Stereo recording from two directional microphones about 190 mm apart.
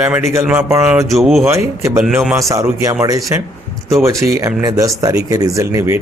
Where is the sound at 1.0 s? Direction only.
Centre (ahead or behind).